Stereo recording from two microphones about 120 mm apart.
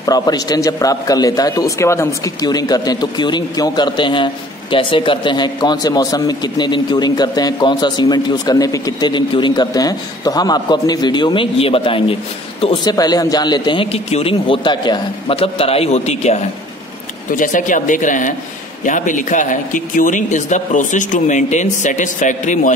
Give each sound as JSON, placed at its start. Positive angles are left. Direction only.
{"t": 0.0, "sound": "a man's voice", "side_deg": 30}
{"t": 12.8, "sound": "a man's voice", "side_deg": 35}
{"t": 13.9, "sound": "a man's voice", "side_deg": 55}
{"t": 17.3, "sound": "speech", "side_deg": 90}